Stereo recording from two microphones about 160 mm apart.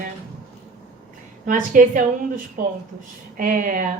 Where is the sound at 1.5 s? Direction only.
55° right (ahead or behind).